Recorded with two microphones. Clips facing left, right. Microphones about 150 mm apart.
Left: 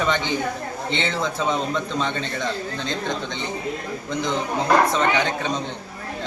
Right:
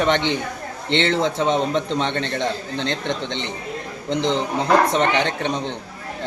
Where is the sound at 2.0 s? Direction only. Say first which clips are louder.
Right 3 dB; 65° right (ahead or behind).